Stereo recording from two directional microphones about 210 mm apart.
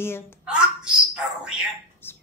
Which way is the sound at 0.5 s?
5° right (ahead or behind).